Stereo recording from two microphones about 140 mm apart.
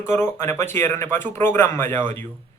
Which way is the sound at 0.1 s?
15° left (ahead or behind).